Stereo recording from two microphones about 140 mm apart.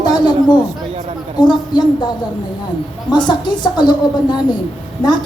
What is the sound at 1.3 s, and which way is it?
A woman's voice, 30° left (ahead or behind).